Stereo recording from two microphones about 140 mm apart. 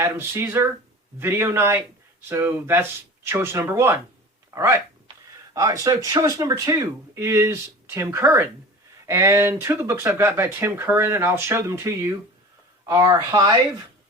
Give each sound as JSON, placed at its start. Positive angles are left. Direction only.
{"t": 0.0, "sound": "speech", "side_deg": -15}